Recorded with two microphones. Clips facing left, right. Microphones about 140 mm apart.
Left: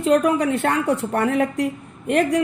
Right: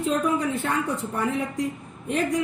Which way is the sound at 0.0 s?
70° left (ahead or behind).